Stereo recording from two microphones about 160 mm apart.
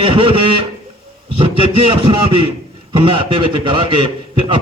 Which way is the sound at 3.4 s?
30° right (ahead or behind).